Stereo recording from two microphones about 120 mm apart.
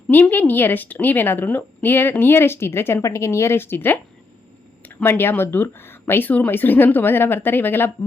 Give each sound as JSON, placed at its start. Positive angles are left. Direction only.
{"t": 0.1, "sound": "a woman's voice", "side_deg": 15}